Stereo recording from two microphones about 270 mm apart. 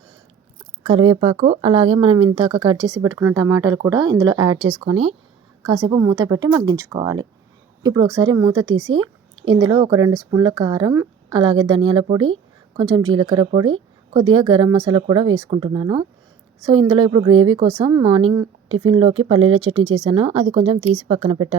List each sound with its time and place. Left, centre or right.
0.9 s speech: centre
5.6 s a woman's voice: centre